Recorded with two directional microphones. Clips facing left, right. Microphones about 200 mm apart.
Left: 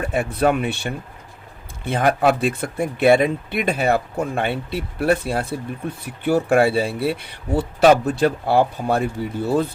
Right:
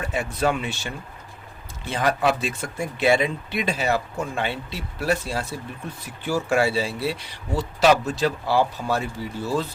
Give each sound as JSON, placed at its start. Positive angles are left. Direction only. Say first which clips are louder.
{"t": 0.0, "sound": "speech", "louder": "left 5 dB", "side_deg": 55}